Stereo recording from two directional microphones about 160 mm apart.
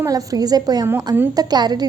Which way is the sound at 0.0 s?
20° right (ahead or behind).